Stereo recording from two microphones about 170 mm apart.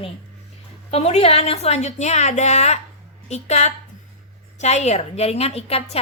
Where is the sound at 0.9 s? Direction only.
40° left (ahead or behind).